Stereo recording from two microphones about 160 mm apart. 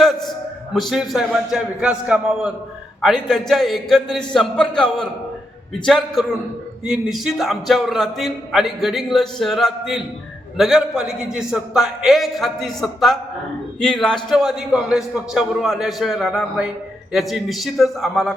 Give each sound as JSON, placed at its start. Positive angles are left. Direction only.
{"t": 0.7, "sound": "a man's voice", "side_deg": 0}